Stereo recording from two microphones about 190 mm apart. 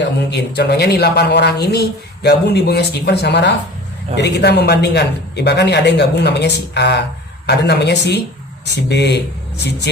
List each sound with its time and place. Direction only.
0.3 s speech: 60° left (ahead or behind)